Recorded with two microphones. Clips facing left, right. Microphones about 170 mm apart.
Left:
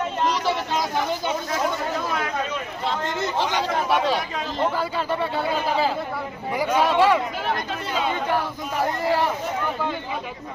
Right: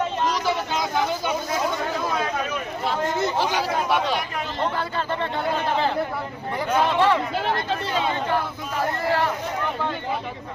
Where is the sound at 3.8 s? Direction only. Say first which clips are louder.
Left 1 dB; 5° left (ahead or behind).